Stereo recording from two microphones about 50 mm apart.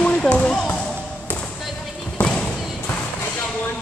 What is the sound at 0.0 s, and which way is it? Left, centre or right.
Basketball bounce, left.